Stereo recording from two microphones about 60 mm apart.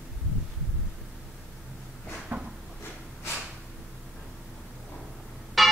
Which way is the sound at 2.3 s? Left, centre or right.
Right.